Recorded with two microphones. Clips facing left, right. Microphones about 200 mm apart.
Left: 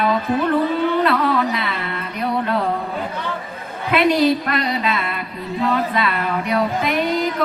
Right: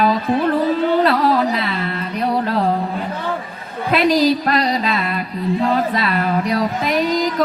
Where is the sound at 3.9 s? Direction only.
35° right (ahead or behind).